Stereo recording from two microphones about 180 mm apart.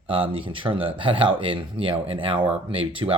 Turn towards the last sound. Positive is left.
turn(degrees=-30)  # may be behind; listen again after turning